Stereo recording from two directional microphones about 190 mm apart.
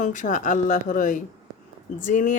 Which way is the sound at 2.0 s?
40° left (ahead or behind).